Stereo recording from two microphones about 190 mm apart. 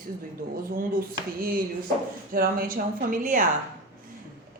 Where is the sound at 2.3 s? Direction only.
50° right (ahead or behind).